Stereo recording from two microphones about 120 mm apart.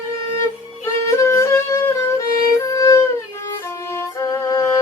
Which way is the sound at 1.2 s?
25° left (ahead or behind).